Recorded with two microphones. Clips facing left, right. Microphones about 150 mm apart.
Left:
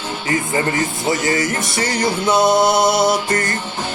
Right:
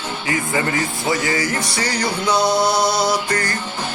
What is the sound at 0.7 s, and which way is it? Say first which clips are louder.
Music: left 1 dB; 20° left (ahead or behind).